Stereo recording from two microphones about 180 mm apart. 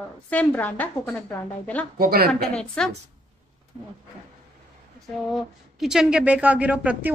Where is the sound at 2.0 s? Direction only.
55° right (ahead or behind).